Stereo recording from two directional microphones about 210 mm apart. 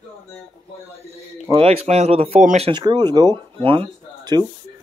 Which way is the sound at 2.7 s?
20° right (ahead or behind).